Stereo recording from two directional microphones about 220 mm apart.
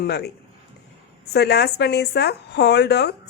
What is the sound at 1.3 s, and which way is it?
A woman's voice, 50° left (ahead or behind).